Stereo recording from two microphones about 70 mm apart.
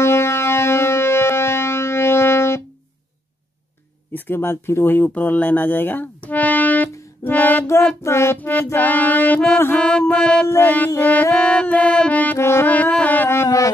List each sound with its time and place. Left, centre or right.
0.0 s music: left
4.1 s speech: left
7.6 s child singing: left
8.4 s music: left
9.8 s mantra: centre
10.4 s child singing: left
11.0 s music: left
12.4 s music: left
12.6 s music: left
13.3 s music: left